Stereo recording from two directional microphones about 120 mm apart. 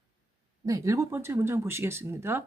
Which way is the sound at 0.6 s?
30° right (ahead or behind).